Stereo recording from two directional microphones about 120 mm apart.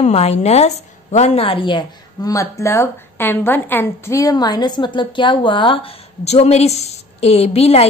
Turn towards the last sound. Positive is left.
turn(degrees=60)  # may be behind; listen again after turning